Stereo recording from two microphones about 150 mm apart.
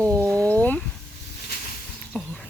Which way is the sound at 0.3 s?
10° left (ahead or behind).